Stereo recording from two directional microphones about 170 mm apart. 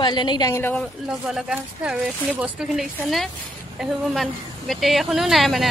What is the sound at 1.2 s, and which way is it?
Speech, 5° right (ahead or behind).